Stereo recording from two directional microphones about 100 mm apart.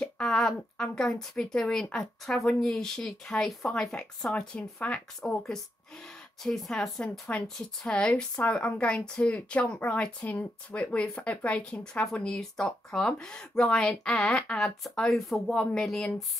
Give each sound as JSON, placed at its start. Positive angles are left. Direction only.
{"t": 0.0, "sound": "a woman's voice", "side_deg": 5}